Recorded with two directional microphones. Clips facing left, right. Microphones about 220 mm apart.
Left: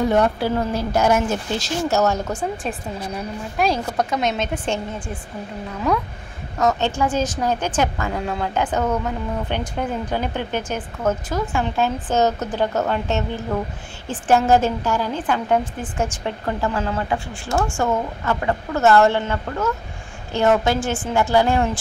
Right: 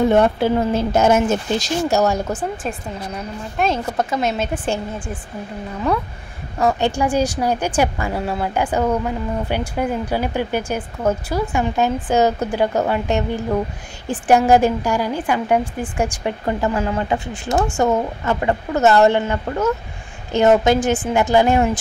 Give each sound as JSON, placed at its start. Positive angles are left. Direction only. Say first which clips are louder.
{"t": 0.0, "sound": "speech", "louder": "right 3 dB", "side_deg": -25}
{"t": 3.2, "sound": "speech", "louder": "right 1 dB", "side_deg": 0}
{"t": 6.6, "sound": "a woman's voice", "louder": "right 2 dB", "side_deg": -10}